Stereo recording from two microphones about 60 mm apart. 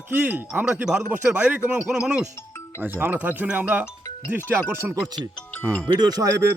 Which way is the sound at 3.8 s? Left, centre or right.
Left.